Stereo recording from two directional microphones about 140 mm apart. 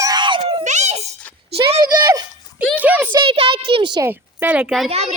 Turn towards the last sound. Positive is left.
turn(degrees=0)  # may be behind; listen again after turning